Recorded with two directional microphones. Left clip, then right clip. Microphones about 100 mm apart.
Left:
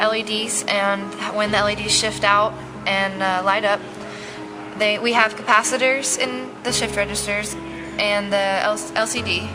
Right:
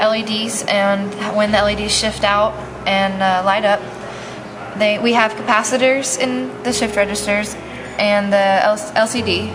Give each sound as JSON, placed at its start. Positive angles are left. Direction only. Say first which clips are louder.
{"t": 0.0, "sound": "a woman's voice", "louder": "right 3 dB", "side_deg": 25}
{"t": 4.8, "sound": "a woman's voice", "louder": "right 3 dB", "side_deg": 20}